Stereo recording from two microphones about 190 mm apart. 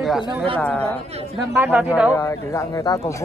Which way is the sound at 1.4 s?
10° right (ahead or behind).